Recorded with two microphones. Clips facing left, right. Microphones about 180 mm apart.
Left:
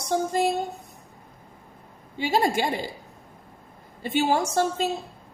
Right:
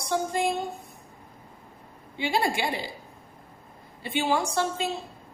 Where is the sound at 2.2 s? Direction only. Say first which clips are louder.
Left 3 dB; 45° left (ahead or behind).